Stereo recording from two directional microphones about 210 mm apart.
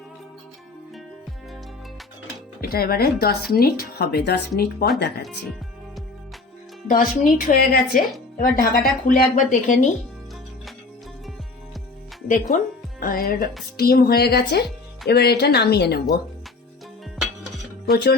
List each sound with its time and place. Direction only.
2.6 s speech: 45° left (ahead or behind)
6.8 s speech: 40° left (ahead or behind)
12.5 s speech: 40° left (ahead or behind)
17.8 s speech: 50° left (ahead or behind)